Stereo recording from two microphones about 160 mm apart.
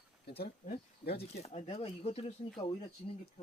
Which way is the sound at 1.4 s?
45° left (ahead or behind).